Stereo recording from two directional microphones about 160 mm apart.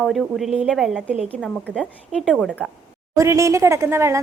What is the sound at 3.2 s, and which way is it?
A woman's voice, 20° right (ahead or behind).